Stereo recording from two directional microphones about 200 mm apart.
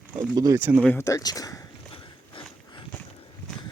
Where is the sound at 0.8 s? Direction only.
10° left (ahead or behind).